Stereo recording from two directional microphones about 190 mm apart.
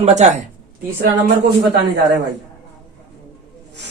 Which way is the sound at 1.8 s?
65° right (ahead or behind).